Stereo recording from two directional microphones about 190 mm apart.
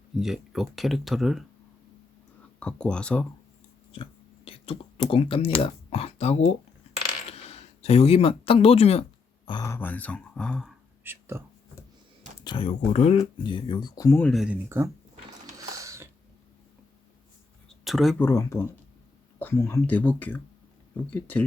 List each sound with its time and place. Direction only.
0.2 s speech: centre (ahead or behind)
2.6 s speech: 5° left (ahead or behind)
4.4 s speech: 30° left (ahead or behind)
9.5 s speech: 20° left (ahead or behind)
11.0 s whispering: 10° right (ahead or behind)
12.5 s speech: 30° left (ahead or behind)
14.3 s speech: 5° right (ahead or behind)
15.7 s a sound: 15° right (ahead or behind)
17.7 s a sound: centre (ahead or behind)
18.3 s speech: 15° left (ahead or behind)